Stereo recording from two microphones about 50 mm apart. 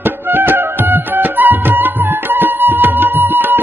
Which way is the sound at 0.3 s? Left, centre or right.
Right.